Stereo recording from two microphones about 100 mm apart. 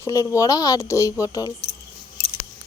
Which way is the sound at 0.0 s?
35° left (ahead or behind).